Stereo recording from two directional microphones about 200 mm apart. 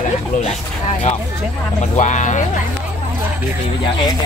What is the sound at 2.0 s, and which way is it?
Speech, 35° left (ahead or behind).